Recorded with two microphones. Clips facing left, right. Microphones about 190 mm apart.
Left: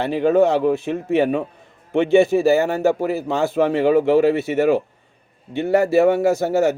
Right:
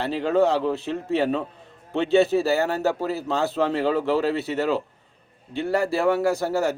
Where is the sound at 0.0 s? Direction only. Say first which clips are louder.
Left 5 dB; 15° left (ahead or behind).